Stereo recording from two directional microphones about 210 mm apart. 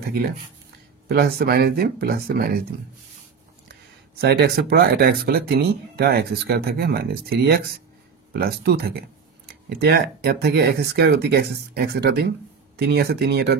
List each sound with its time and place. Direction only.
1.0 s speech: 50° right (ahead or behind)
4.2 s speech: 50° right (ahead or behind)